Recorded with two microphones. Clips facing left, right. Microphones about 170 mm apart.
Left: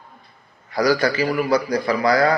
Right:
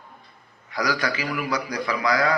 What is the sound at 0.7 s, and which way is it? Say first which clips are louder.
A man's voice: left 7 dB; 35° left (ahead or behind).